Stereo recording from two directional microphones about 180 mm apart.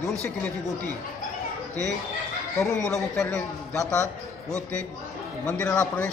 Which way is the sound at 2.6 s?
5° left (ahead or behind).